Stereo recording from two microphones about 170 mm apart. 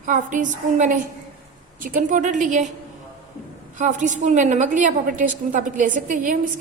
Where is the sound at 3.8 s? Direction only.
45° right (ahead or behind).